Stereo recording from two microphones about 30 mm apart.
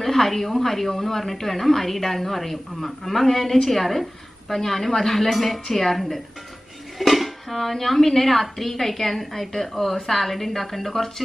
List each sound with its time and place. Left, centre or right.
0.0 s a woman's voice: centre
5.9 s a woman's voice: centre